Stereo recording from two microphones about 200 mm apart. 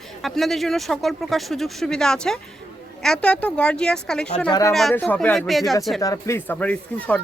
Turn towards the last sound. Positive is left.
turn(degrees=5)  # may be behind; listen again after turning